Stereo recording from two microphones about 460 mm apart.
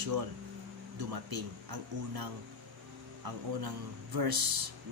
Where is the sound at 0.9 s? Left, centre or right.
Right.